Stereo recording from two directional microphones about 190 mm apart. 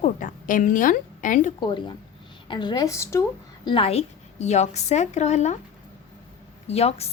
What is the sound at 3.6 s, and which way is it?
A woman's voice, 30° left (ahead or behind).